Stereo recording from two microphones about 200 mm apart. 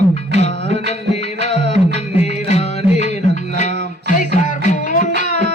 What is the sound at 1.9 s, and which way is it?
Music, 35° left (ahead or behind).